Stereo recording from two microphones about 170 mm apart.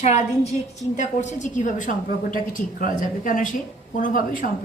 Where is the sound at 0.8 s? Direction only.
45° left (ahead or behind).